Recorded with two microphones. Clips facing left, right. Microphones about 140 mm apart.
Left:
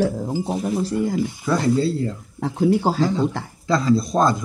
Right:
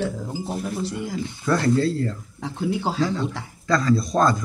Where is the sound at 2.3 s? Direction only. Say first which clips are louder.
Left 9 dB; 45° left (ahead or behind).